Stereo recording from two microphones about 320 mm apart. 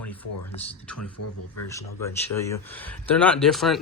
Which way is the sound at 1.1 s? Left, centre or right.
Left.